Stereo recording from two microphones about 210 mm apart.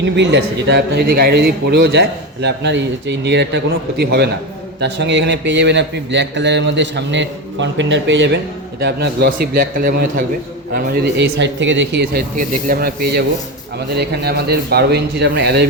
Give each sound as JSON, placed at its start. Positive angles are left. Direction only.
{"t": 0.0, "sound": "a man's voice", "side_deg": -55}
{"t": 12.4, "sound": "a man's voice", "side_deg": -45}